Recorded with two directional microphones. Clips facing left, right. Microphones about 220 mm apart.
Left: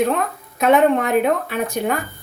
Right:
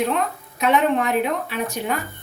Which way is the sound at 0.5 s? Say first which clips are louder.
Left 4 dB; 50° left (ahead or behind).